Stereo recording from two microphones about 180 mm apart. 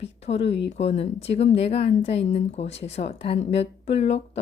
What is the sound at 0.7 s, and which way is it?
A woman's voice, 35° left (ahead or behind).